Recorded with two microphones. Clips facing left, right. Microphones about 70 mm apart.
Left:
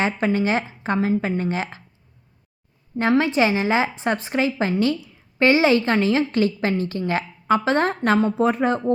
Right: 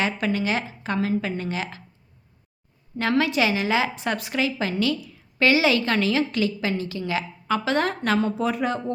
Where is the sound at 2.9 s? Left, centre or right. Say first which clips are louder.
Left 3 dB; left.